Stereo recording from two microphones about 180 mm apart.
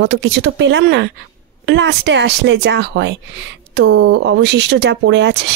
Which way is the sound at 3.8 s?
90° right.